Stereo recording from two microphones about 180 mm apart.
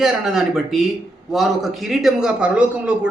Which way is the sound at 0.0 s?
Centre (ahead or behind).